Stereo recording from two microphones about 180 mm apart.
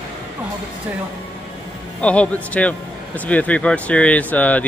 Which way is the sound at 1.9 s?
5° left (ahead or behind).